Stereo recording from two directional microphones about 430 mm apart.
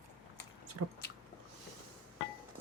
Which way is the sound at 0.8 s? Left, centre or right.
Right.